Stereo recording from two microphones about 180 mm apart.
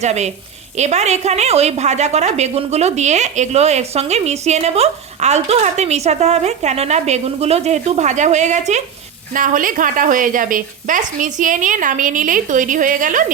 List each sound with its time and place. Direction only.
0.0 s a woman's voice: 40° right (ahead or behind)